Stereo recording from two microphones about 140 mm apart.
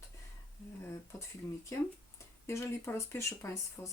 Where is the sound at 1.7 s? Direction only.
20° left (ahead or behind).